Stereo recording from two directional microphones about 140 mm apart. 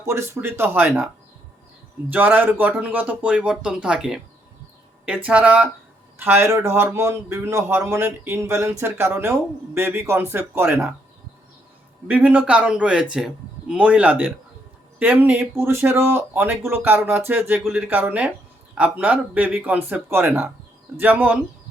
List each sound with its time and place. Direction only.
0.0 s speech: 20° right (ahead or behind)
12.0 s speech: 10° right (ahead or behind)